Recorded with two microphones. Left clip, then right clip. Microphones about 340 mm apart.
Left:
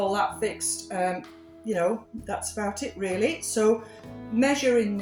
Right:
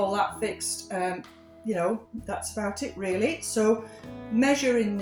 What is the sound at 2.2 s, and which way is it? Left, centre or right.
Speech, right.